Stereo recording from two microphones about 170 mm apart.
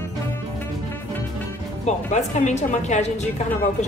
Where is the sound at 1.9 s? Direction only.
45° left (ahead or behind).